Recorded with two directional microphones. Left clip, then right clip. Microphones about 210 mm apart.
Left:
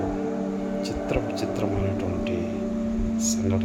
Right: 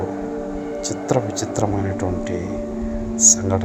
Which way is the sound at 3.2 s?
30° right (ahead or behind).